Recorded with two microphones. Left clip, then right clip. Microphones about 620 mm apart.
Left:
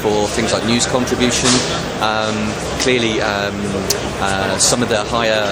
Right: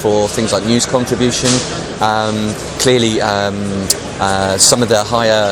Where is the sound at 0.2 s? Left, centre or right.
Right.